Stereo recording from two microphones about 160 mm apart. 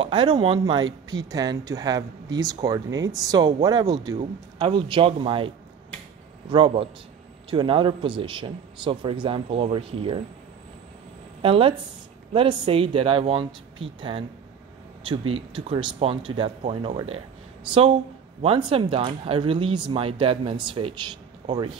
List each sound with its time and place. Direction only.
0.0 s speech: 30° right (ahead or behind)
6.5 s speech: 35° right (ahead or behind)
11.4 s speech: 35° right (ahead or behind)
18.4 s speech: 35° right (ahead or behind)